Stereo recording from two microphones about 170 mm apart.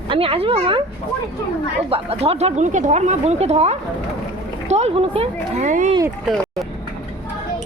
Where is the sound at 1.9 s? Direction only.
35° right (ahead or behind).